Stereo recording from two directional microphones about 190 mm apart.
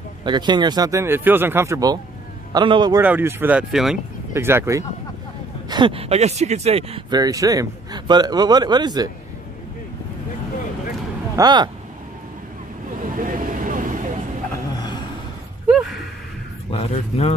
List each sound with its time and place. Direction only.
0.2 s speech: 25° right (ahead or behind)
3.0 s speech: 10° right (ahead or behind)
5.7 s speech: 25° right (ahead or behind)
11.3 s speech: 20° right (ahead or behind)
13.0 s vehicle: 45° right (ahead or behind)
16.7 s speech: 35° left (ahead or behind)